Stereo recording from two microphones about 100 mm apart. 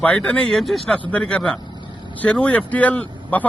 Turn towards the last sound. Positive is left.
turn(degrees=15)  # may be behind; listen again after turning